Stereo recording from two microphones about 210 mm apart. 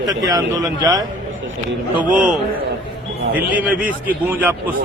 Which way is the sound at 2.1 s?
5° right (ahead or behind).